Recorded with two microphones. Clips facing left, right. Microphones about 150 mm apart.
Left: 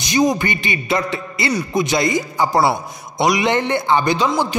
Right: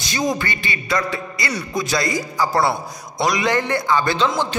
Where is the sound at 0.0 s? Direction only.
20° left (ahead or behind).